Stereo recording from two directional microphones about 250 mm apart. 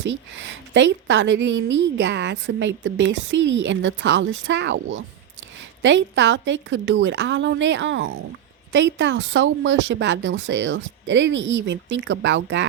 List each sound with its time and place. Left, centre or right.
0.0 s a woman's voice: right